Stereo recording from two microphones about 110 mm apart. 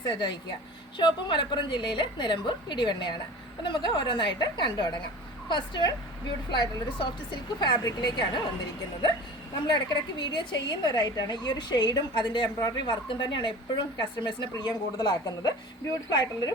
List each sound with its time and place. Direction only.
0.1 s a woman's voice: 40° left (ahead or behind)
9.6 s a woman's voice: 45° left (ahead or behind)